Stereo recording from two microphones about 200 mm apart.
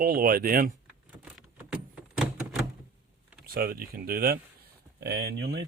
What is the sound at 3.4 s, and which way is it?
Speech, 50° right (ahead or behind).